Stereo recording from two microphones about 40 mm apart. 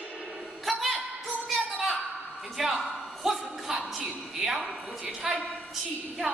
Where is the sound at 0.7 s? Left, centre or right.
Centre.